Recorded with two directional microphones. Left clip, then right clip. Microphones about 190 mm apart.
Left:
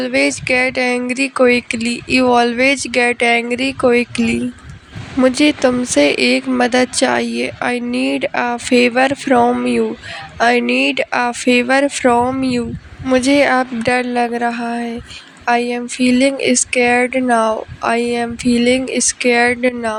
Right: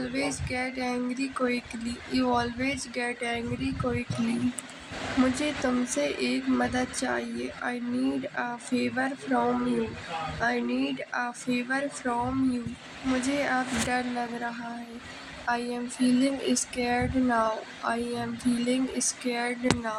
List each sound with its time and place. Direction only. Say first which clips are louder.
0.0 s speech: left 16 dB; 45° left (ahead or behind)
5.2 s speech: left 16 dB; 45° left (ahead or behind)